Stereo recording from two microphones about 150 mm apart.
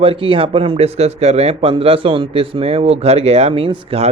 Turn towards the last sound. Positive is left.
turn(degrees=-40)  # may be behind; listen again after turning